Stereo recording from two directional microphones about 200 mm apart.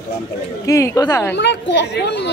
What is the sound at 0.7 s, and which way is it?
Speech, 15° left (ahead or behind).